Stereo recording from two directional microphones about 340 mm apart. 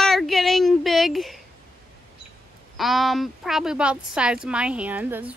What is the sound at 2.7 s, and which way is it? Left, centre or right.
A woman's voice, centre.